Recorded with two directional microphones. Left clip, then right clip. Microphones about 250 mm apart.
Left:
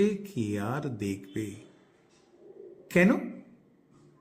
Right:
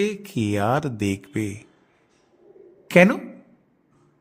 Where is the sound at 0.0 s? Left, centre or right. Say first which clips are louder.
Right 4 dB; right.